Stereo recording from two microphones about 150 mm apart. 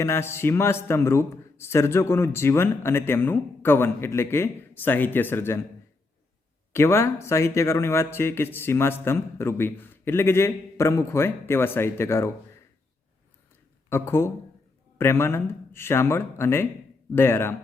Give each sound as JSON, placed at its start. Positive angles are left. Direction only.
{"t": 0.0, "sound": "a man's voice", "side_deg": 15}
{"t": 6.7, "sound": "a man's voice", "side_deg": 15}
{"t": 13.9, "sound": "a man's voice", "side_deg": 15}